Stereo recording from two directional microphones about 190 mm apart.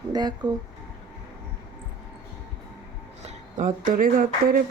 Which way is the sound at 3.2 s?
40° right (ahead or behind).